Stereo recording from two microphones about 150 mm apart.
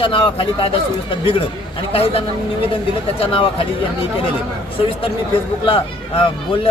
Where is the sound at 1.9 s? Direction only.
40° left (ahead or behind).